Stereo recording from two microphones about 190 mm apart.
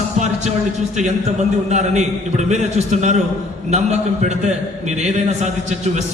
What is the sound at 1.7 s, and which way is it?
A man's voice, 35° right (ahead or behind).